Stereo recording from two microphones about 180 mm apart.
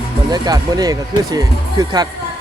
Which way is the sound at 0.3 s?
20° right (ahead or behind).